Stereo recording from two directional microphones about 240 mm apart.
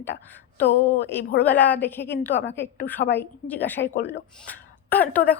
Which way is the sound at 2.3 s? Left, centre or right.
Left.